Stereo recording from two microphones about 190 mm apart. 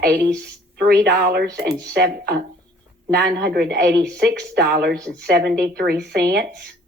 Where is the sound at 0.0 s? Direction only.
55° right (ahead or behind).